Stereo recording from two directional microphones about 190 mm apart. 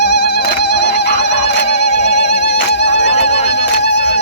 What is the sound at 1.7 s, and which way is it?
Music, 35° left (ahead or behind).